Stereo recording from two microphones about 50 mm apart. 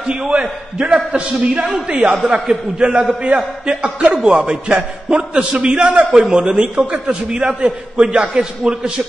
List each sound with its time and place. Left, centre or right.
0.3 s a man's voice: centre